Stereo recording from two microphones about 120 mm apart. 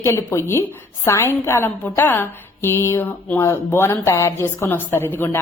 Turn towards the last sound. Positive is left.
turn(degrees=15)  # may be behind; listen again after turning